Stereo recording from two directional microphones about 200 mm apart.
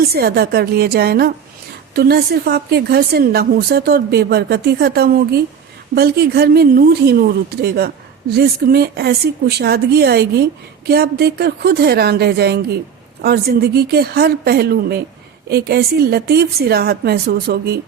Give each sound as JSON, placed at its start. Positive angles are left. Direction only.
{"t": 0.0, "sound": "a woman's voice", "side_deg": -50}